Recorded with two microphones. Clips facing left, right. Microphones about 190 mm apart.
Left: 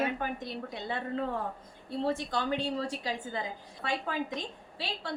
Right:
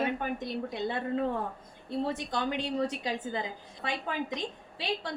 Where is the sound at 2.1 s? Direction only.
20° right (ahead or behind).